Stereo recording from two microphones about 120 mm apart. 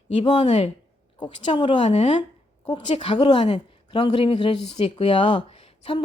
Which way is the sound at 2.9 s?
55° left (ahead or behind).